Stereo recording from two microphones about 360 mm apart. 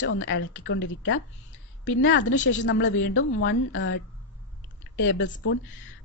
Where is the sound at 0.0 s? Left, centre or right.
Left.